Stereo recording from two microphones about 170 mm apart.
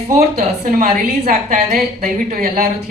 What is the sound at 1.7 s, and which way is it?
Speech, 60° right (ahead or behind).